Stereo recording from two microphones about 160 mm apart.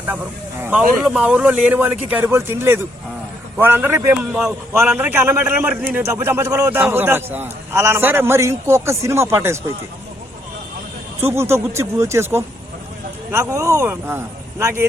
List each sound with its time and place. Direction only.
0.6 s a man's voice: 10° right (ahead or behind)
11.2 s a man's voice: 15° right (ahead or behind)